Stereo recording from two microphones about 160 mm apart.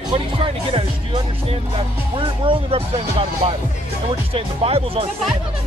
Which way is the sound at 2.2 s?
35° right (ahead or behind).